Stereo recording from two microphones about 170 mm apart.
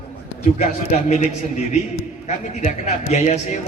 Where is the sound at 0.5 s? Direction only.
40° left (ahead or behind).